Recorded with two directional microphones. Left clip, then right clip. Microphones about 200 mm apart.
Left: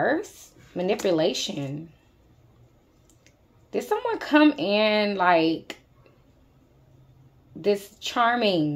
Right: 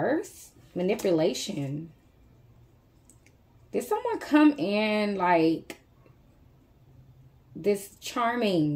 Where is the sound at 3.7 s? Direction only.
15° right (ahead or behind).